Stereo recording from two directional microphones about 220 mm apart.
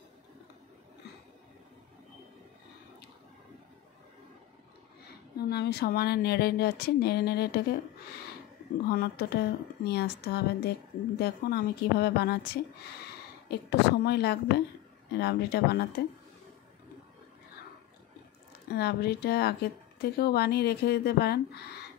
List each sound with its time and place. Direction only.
5.0 s a woman's voice: 45° left (ahead or behind)
8.9 s a woman's voice: 45° left (ahead or behind)
13.5 s a woman's voice: 50° left (ahead or behind)
18.7 s a woman's voice: 45° left (ahead or behind)